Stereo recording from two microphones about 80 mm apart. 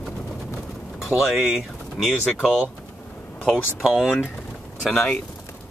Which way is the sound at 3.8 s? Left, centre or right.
Centre.